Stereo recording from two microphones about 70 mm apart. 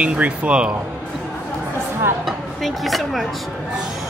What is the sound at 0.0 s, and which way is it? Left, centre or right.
Speech, centre.